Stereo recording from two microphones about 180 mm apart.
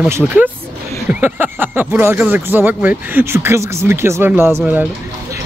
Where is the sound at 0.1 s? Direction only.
10° right (ahead or behind).